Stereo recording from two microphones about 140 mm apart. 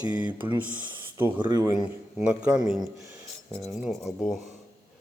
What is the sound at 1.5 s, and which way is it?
Speech, 25° right (ahead or behind).